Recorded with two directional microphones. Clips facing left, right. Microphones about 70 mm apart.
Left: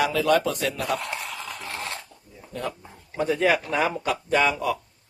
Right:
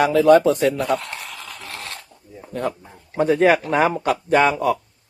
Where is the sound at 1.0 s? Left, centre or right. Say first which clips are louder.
Left 1 dB; centre.